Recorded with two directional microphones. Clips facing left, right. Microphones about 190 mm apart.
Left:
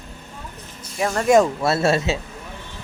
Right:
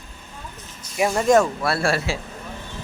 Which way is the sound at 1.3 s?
20° left (ahead or behind).